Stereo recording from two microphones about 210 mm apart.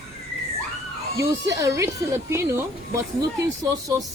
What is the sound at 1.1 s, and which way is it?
Speech, 15° right (ahead or behind).